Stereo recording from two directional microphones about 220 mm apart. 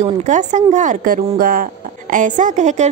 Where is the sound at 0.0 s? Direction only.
30° right (ahead or behind).